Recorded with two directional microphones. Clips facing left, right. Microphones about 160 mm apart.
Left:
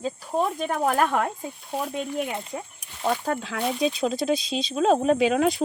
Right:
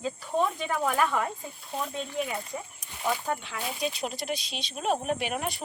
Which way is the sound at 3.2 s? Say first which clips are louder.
Left 6 dB; 65° left (ahead or behind).